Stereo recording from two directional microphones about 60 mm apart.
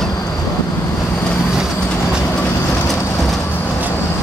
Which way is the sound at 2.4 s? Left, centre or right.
Centre.